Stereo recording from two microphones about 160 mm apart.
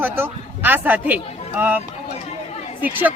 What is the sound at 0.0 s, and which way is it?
Speech, 10° right (ahead or behind).